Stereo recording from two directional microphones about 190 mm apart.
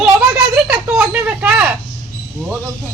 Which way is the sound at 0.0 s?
5° right (ahead or behind).